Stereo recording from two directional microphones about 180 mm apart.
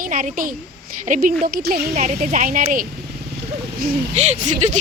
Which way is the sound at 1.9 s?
45° right (ahead or behind).